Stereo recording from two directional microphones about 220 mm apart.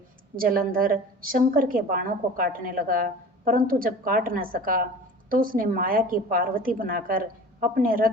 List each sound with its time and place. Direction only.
0.3 s a woman's voice: 40° right (ahead or behind)